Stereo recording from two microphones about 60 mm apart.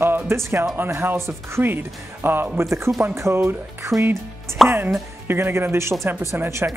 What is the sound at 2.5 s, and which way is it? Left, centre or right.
Speech, right.